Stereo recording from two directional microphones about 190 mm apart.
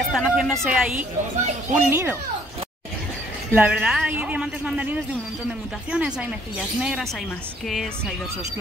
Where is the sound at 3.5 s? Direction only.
10° right (ahead or behind).